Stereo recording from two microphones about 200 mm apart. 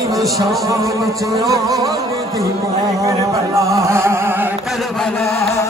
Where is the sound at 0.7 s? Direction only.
15° right (ahead or behind).